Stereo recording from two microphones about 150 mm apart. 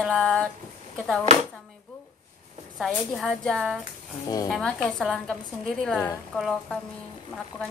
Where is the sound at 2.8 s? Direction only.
Centre (ahead or behind).